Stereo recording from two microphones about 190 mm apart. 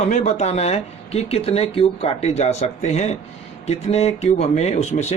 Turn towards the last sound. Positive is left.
turn(degrees=35)  # may be behind; listen again after turning